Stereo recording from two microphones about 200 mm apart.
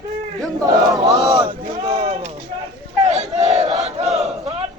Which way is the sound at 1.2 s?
20° right (ahead or behind).